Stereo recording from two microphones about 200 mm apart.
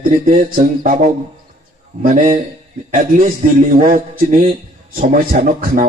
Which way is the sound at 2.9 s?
40° right (ahead or behind).